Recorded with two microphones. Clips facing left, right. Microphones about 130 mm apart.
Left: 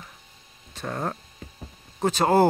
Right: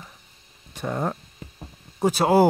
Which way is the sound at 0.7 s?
10° right (ahead or behind).